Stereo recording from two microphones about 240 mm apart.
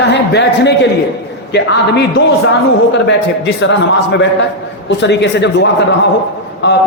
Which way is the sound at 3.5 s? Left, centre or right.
Left.